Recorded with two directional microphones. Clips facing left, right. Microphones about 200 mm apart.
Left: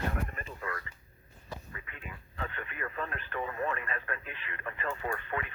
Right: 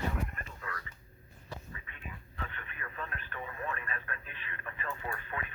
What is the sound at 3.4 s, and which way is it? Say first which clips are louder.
Radio: left 4 dB; 55° left (ahead or behind).